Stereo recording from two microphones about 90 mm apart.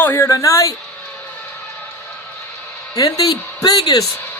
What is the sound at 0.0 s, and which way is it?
Speech, 30° left (ahead or behind).